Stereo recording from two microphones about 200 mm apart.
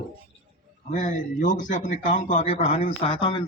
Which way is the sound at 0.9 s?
40° left (ahead or behind).